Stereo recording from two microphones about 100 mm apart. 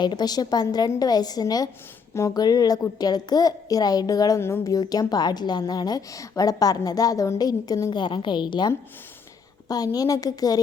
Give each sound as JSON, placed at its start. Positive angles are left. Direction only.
{"t": 0.0, "sound": "a child's voice", "side_deg": 45}
{"t": 7.9, "sound": "a woman's voice", "side_deg": 50}
{"t": 9.6, "sound": "a child's voice", "side_deg": 40}